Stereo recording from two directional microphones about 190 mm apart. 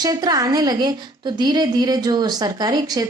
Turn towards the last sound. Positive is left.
turn(degrees=-20)  # may be behind; listen again after turning